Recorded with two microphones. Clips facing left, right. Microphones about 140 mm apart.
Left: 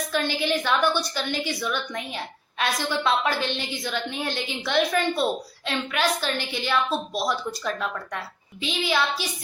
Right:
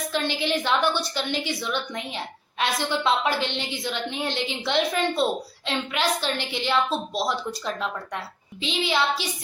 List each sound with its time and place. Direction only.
0.1 s a woman's voice: 20° right (ahead or behind)